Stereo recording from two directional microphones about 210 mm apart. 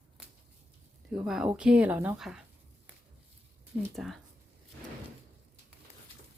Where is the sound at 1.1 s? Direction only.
Centre (ahead or behind).